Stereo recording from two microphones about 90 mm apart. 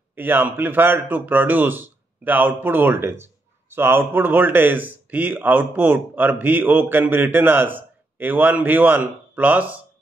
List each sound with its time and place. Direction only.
0.1 s speech: 20° right (ahead or behind)